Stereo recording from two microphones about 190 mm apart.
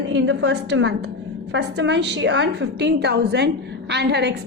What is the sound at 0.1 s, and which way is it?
A woman's voice, 70° right (ahead or behind).